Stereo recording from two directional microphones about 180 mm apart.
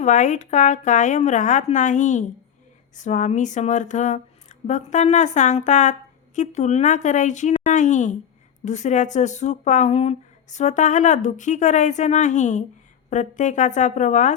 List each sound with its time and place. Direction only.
0.0 s a woman's voice: 40° left (ahead or behind)